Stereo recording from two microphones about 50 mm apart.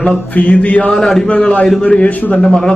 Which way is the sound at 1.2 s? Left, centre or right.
Left.